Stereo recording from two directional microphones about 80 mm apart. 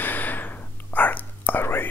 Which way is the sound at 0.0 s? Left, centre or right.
Left.